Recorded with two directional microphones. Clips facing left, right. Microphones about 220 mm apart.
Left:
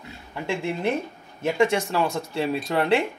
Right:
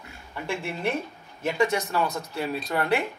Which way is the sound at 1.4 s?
25° left (ahead or behind).